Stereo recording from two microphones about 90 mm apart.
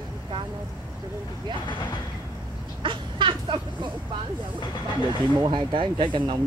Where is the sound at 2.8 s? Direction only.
65° right (ahead or behind).